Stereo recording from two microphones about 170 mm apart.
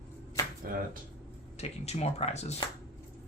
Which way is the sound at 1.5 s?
40° left (ahead or behind).